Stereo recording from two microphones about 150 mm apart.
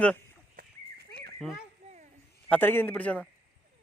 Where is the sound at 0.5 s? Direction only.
90° right.